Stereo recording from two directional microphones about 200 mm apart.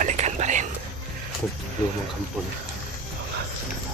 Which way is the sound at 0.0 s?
35° right (ahead or behind).